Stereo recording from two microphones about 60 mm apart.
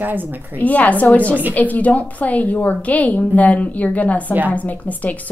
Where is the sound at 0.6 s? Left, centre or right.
Left.